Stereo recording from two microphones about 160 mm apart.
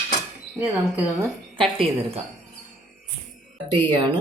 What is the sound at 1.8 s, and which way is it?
Speech, 35° right (ahead or behind).